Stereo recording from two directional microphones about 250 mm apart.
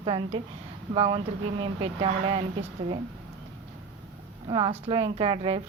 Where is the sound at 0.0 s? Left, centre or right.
Right.